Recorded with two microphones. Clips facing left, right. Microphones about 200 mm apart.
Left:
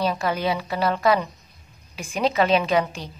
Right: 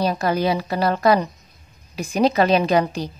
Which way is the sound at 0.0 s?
40° right (ahead or behind).